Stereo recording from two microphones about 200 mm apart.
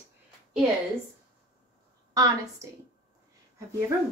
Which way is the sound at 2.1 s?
15° right (ahead or behind).